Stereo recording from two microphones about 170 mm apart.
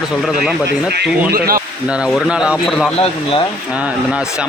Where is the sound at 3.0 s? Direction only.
35° left (ahead or behind).